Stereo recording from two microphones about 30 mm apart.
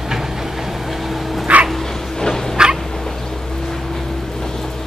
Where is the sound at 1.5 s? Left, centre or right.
Right.